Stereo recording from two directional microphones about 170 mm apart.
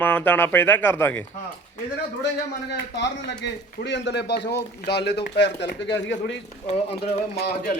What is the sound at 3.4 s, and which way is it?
Speech, 90° left.